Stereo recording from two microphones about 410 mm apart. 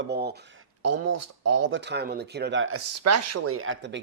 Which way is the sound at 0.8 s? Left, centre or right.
Right.